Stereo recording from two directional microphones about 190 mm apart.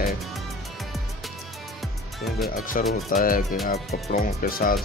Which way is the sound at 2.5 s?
45° left (ahead or behind).